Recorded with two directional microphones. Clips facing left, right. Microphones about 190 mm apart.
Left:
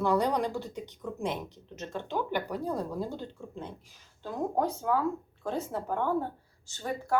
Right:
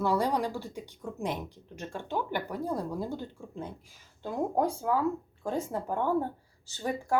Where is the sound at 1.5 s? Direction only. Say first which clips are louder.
Left 1 dB; 10° right (ahead or behind).